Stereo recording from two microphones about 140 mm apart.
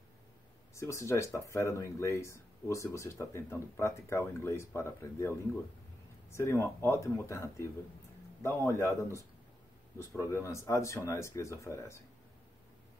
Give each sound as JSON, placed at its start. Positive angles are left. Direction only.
{"t": 0.7, "sound": "speech", "side_deg": 20}
{"t": 6.3, "sound": "speech", "side_deg": 20}
{"t": 9.9, "sound": "speech", "side_deg": 20}